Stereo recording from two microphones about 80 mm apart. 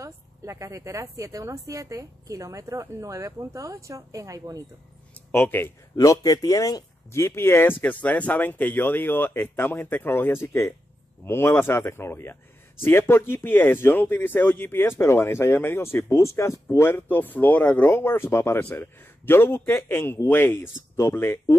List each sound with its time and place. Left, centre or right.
0.0 s a sound: right
1.1 s a woman's voice: right
5.3 s speech: left
5.9 s speech: left
18.6 s speech: left